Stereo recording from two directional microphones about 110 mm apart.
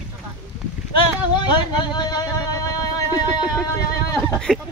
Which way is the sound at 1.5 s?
45° left (ahead or behind).